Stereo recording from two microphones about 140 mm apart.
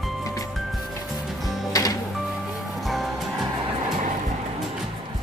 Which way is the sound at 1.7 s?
25° left (ahead or behind).